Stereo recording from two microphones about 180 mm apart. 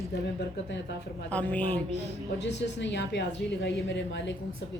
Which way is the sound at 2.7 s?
75° left (ahead or behind).